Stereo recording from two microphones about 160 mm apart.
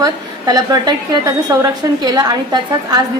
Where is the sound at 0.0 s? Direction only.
25° right (ahead or behind).